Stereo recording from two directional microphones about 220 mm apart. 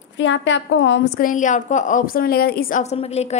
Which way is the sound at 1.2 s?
35° left (ahead or behind).